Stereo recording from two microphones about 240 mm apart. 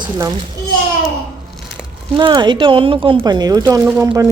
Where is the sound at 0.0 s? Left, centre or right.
Centre.